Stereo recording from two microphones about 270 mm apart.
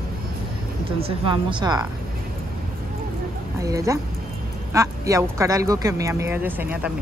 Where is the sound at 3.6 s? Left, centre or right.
Centre.